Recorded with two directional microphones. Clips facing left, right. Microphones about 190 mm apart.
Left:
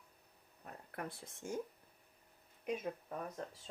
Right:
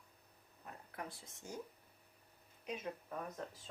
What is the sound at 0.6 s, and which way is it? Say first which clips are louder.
Speech: left 3 dB; 55° left (ahead or behind).